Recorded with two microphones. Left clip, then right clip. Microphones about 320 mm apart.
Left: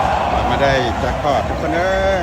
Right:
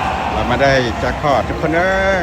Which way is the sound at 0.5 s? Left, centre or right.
Centre.